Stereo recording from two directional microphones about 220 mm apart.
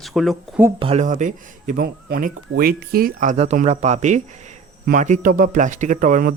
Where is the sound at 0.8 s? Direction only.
25° right (ahead or behind).